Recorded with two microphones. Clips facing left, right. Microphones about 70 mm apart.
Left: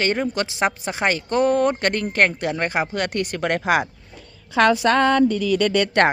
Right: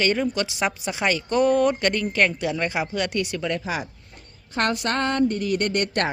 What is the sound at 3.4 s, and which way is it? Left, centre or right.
Speech, left.